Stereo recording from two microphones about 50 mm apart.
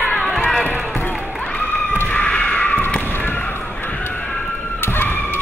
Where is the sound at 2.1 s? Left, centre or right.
Left.